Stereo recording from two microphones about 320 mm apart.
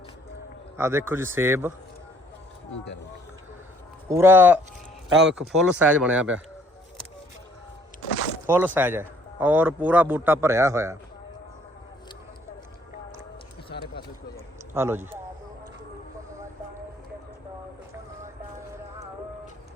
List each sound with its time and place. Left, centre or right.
0.8 s a man's voice: centre
4.1 s a man's voice: centre
8.4 s a man's voice: centre
14.7 s a man's voice: centre